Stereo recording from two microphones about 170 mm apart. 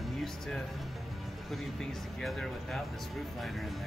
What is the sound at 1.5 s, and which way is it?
Speech, centre (ahead or behind).